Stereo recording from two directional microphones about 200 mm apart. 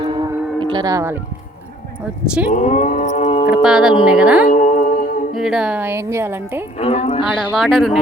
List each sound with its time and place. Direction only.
0.0 s a sound: 20° right (ahead or behind)
2.5 s a sound: 35° left (ahead or behind)
3.5 s speech: 5° right (ahead or behind)
4.4 s music: 45° left (ahead or behind)
5.3 s a woman's voice: centre (ahead or behind)
6.7 s speech: 30° left (ahead or behind)
7.3 s speech: centre (ahead or behind)